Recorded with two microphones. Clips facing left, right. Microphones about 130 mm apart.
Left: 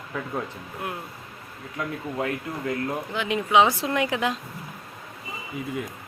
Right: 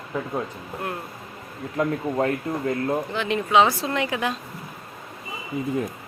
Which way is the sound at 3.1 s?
15° left (ahead or behind).